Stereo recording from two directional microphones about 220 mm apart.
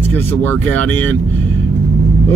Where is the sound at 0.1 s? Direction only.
10° left (ahead or behind).